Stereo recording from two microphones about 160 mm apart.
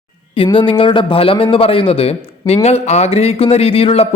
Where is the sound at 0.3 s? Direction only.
30° left (ahead or behind).